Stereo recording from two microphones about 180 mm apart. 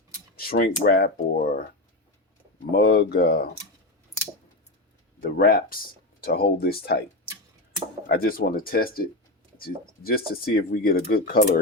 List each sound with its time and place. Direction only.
0.3 s speech: 55° left (ahead or behind)
2.7 s speech: 65° left (ahead or behind)
5.4 s speech: 50° left (ahead or behind)
8.0 s speech: 55° left (ahead or behind)